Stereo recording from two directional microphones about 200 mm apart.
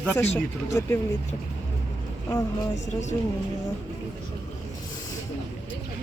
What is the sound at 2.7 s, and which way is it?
Speech, 35° left (ahead or behind).